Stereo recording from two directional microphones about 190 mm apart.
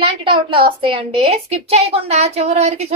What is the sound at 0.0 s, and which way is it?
A woman's voice, 25° right (ahead or behind).